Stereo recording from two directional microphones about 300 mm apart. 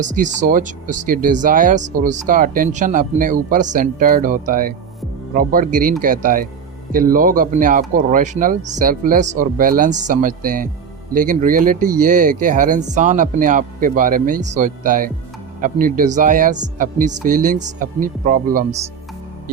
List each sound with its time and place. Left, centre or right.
0.0 s speech: right